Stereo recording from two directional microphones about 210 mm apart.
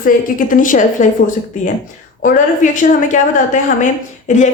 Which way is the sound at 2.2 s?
40° left (ahead or behind).